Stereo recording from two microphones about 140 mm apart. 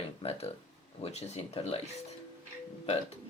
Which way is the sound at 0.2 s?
45° left (ahead or behind).